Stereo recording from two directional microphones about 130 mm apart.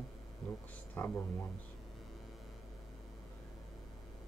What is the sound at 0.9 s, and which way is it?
Speech, 15° left (ahead or behind).